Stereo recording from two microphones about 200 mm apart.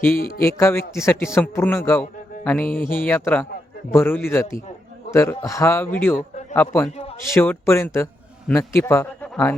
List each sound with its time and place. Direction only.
0.2 s a man's voice: 45° left (ahead or behind)
0.4 s a man's voice: 15° left (ahead or behind)
6.9 s a sound: 30° left (ahead or behind)
7.3 s a man's voice: 10° left (ahead or behind)